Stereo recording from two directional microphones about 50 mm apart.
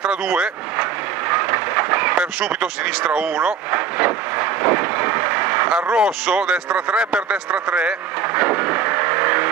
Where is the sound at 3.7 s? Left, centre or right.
Right.